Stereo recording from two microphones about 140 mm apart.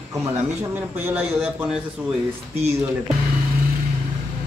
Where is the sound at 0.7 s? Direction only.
15° right (ahead or behind).